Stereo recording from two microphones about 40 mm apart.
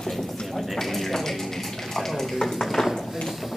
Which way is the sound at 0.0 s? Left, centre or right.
Centre.